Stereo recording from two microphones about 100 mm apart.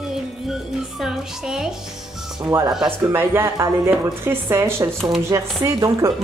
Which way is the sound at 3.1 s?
25° right (ahead or behind).